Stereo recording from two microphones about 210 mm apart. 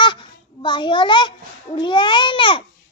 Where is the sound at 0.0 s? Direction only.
20° left (ahead or behind).